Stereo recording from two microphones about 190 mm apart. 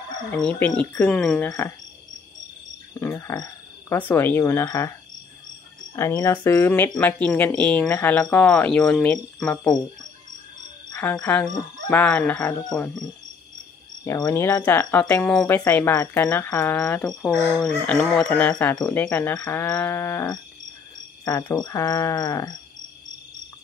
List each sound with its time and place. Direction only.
0.3 s speech: 10° left (ahead or behind)
3.0 s a sound: 15° left (ahead or behind)
3.9 s speech: 10° left (ahead or behind)
5.9 s speech: 15° left (ahead or behind)
10.9 s speech: 10° left (ahead or behind)
14.0 s speech: 15° left (ahead or behind)